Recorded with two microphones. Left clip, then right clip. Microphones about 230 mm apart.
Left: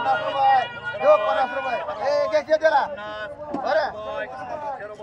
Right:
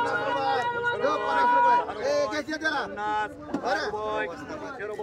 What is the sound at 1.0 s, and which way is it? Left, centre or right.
Music, centre.